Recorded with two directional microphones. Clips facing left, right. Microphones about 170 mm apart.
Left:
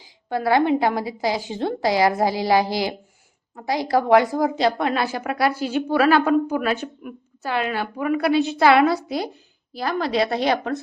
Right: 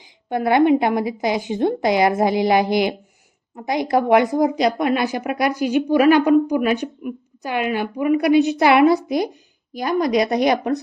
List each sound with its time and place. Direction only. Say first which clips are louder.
0.0 s a woman's voice: right 2 dB; 20° right (ahead or behind)
4.5 s a woman's voice: right 2 dB; 30° left (ahead or behind)
4.9 s a woman's voice: right 3 dB; 15° right (ahead or behind)